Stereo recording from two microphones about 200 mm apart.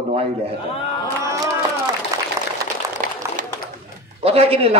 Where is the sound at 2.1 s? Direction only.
15° right (ahead or behind).